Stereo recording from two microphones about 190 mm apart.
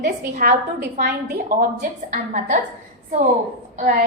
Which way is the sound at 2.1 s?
45° right (ahead or behind).